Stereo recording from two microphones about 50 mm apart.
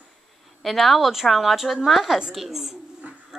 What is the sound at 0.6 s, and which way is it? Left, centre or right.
A woman's voice, centre.